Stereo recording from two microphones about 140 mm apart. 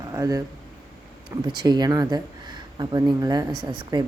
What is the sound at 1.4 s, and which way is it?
Speech, 30° right (ahead or behind).